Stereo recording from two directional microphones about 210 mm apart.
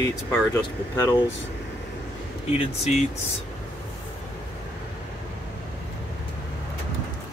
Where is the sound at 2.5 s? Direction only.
30° left (ahead or behind).